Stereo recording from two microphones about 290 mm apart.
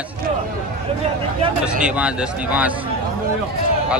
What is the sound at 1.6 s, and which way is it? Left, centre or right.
Speech, centre.